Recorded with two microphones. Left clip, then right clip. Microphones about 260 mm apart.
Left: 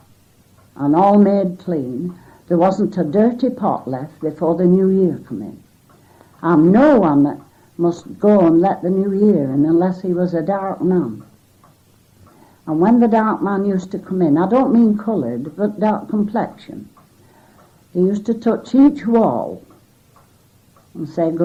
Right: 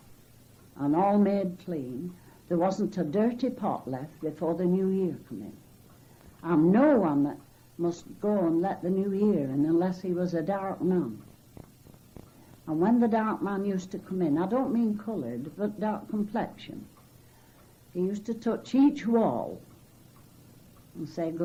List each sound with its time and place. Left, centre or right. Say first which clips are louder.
0.8 s a woman's voice: left 12 dB; left
6.4 s a woman's voice: left 11 dB; left
12.6 s a woman's voice: left 11 dB; left
13.7 s a woman's voice: left 12 dB; left
17.9 s speech: left 14 dB; left
19.0 s a woman's voice: left 11 dB; left
21.1 s a woman's voice: left 14 dB; left